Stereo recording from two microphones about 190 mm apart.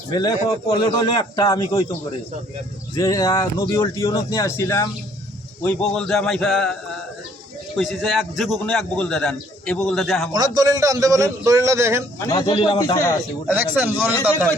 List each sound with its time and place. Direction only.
0.1 s a man's voice: 20° left (ahead or behind)
2.9 s a man's voice: 20° left (ahead or behind)
5.6 s a man's voice: 5° left (ahead or behind)
7.8 s a man's voice: centre (ahead or behind)
10.3 s a man's voice: 20° right (ahead or behind)
12.2 s a man's voice: 20° left (ahead or behind)
13.5 s a man's voice: 10° right (ahead or behind)